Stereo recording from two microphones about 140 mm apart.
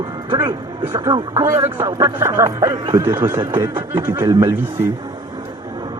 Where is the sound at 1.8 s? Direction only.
25° right (ahead or behind).